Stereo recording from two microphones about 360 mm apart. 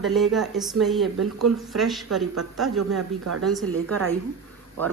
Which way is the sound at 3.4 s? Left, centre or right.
Centre.